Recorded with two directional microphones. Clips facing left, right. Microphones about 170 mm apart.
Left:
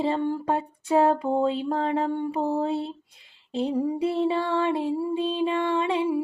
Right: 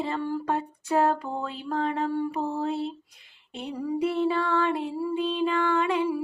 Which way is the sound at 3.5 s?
25° left (ahead or behind).